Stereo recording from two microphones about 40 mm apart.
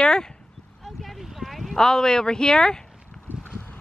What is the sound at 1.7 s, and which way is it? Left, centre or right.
Speech, centre.